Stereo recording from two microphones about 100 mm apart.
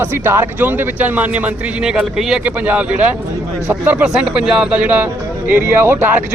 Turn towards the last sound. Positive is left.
turn(degrees=-20)  # may be behind; listen again after turning